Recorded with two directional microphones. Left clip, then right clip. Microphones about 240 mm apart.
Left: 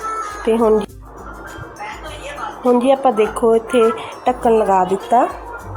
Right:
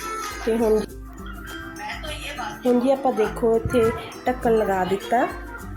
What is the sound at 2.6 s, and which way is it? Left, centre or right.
A woman's voice, centre.